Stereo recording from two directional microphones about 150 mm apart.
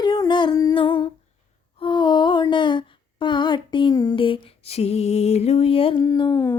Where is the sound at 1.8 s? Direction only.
30° left (ahead or behind).